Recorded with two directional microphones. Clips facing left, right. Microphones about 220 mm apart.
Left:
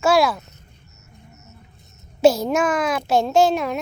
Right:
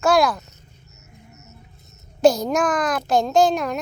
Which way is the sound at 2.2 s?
5° left (ahead or behind).